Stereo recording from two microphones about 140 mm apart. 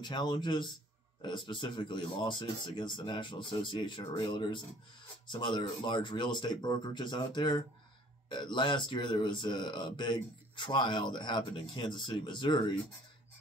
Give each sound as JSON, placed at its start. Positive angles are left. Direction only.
{"t": 0.0, "sound": "speech", "side_deg": 30}